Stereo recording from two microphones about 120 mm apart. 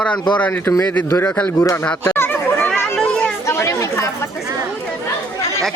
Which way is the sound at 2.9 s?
5° left (ahead or behind).